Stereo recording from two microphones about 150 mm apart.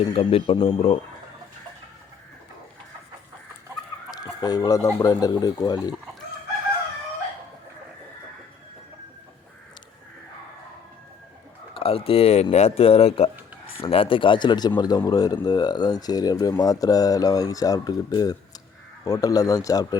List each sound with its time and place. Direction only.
0.1 s speech: 40° left (ahead or behind)
4.1 s chicken: 25° left (ahead or behind)
4.9 s speech: 25° left (ahead or behind)
11.7 s speech: 40° left (ahead or behind)